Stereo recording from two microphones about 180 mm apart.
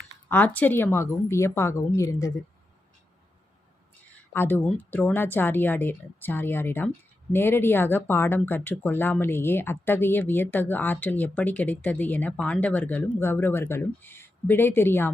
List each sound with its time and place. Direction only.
0.3 s speech: 10° left (ahead or behind)
4.3 s speech: 10° left (ahead or behind)